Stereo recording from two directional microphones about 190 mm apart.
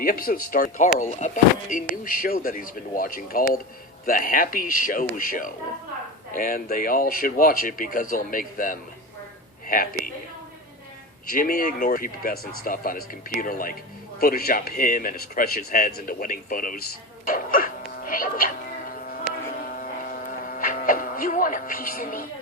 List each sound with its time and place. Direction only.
0.0 s speech: 50° left (ahead or behind)
11.3 s speech: 50° left (ahead or behind)
17.2 s music: 45° left (ahead or behind)
19.6 s buzz: 50° left (ahead or behind)